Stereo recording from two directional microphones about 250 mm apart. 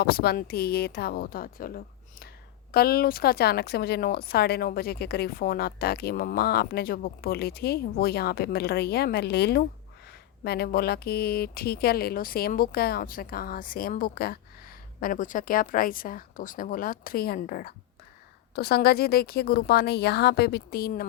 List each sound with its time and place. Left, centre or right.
0.0 s speech: left